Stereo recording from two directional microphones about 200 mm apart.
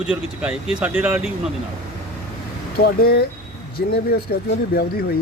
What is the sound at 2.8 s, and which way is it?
Speech, 50° left (ahead or behind).